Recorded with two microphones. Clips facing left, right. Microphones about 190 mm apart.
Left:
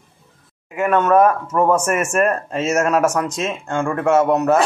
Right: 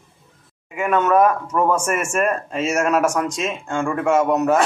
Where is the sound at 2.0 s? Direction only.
10° right (ahead or behind).